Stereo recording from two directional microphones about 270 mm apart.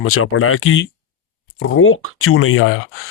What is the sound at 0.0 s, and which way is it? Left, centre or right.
Speech, left.